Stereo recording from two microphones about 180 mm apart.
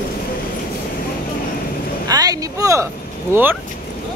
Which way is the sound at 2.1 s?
20° right (ahead or behind).